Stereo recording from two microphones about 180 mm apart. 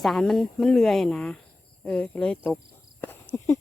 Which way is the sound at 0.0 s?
Centre (ahead or behind).